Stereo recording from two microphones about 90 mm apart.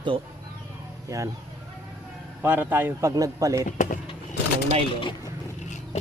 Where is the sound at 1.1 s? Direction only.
35° right (ahead or behind).